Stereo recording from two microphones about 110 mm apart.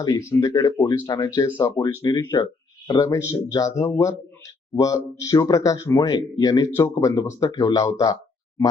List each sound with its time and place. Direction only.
0.0 s speech: 30° left (ahead or behind)